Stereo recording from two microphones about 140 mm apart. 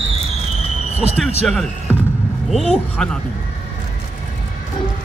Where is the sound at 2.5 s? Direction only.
5° left (ahead or behind).